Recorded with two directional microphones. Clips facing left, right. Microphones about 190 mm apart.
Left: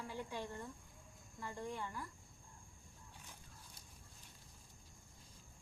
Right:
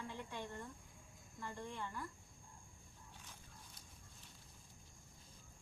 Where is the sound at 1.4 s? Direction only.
15° left (ahead or behind).